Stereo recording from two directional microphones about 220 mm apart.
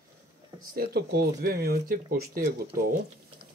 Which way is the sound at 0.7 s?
45° right (ahead or behind).